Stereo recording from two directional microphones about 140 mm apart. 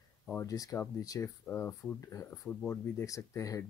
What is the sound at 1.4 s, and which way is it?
Speech, 10° left (ahead or behind).